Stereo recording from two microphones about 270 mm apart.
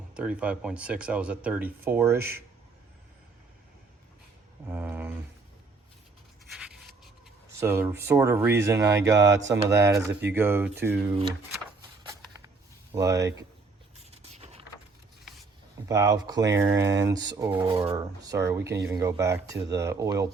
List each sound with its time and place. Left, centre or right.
0.1 s speech: centre
4.7 s a sound: centre
7.6 s speech: centre
12.9 s speech: centre
14.1 s vehicle: right
15.9 s speech: centre